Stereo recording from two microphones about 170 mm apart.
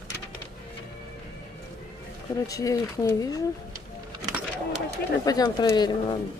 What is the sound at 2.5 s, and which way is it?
Speech, 20° left (ahead or behind).